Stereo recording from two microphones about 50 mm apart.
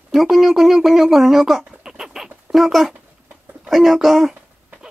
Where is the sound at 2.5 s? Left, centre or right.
Centre.